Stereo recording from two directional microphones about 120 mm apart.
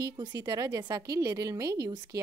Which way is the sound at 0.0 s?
35° right (ahead or behind).